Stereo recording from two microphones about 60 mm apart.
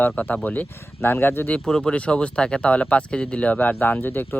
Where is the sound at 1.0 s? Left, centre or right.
Left.